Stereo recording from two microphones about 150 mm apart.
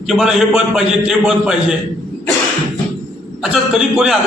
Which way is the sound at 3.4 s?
5° right (ahead or behind).